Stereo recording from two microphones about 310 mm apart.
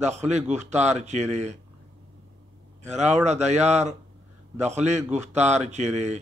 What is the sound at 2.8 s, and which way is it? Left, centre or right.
A man's voice, right.